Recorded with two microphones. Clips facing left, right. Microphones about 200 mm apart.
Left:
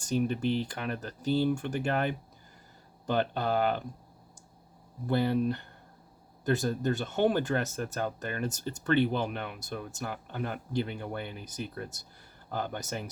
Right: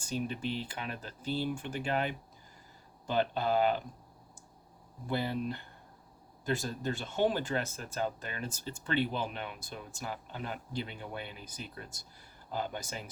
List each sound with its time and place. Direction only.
0.3 s speech: 55° left (ahead or behind)
1.5 s speech: 50° left (ahead or behind)
3.1 s speech: 55° left (ahead or behind)
5.0 s speech: 55° left (ahead or behind)